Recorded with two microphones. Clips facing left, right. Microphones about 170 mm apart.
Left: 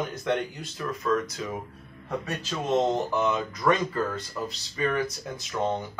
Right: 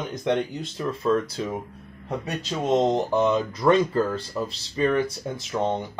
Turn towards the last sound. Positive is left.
turn(degrees=-25)  # may be behind; listen again after turning